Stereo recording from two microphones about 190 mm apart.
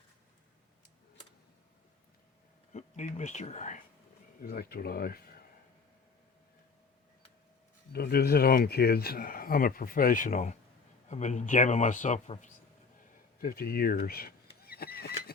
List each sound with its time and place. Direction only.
2.7 s speech: 40° left (ahead or behind)
4.4 s speech: 55° left (ahead or behind)
7.9 s speech: 55° left (ahead or behind); by 12.5 s 40° left (ahead or behind)
13.4 s speech: 50° left (ahead or behind)